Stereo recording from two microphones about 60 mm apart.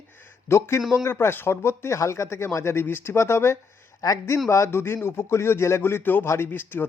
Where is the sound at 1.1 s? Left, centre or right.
Left.